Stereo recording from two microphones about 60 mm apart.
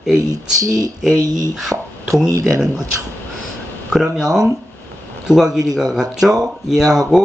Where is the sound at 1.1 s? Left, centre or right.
Right.